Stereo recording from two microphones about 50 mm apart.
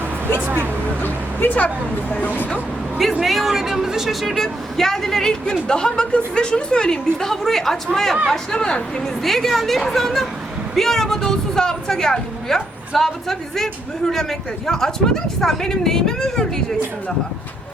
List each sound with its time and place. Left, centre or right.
1.0 s speech: left
3.2 s speech: centre
9.2 s speech: centre